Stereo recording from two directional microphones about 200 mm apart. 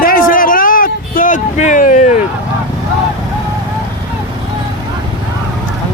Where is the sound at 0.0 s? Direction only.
45° left (ahead or behind).